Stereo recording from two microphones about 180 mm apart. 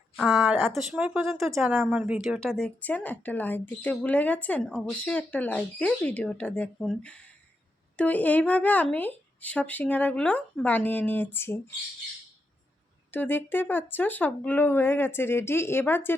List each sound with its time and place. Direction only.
0.2 s speech: centre (ahead or behind)
13.1 s speech: 10° left (ahead or behind)